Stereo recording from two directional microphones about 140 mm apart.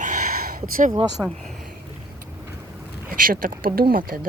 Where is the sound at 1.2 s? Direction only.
5° right (ahead or behind).